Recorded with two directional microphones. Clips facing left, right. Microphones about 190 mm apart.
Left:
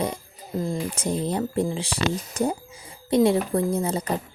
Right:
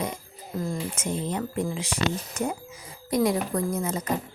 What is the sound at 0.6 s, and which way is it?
Speech, 30° left (ahead or behind).